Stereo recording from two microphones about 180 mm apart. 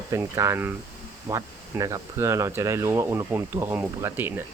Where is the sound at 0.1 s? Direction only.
15° right (ahead or behind).